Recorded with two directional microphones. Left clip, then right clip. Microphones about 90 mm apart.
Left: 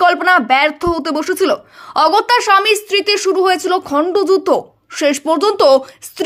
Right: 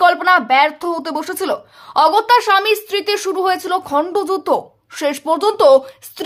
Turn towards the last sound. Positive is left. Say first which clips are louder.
# even
turn(degrees=30)  # may be behind; listen again after turning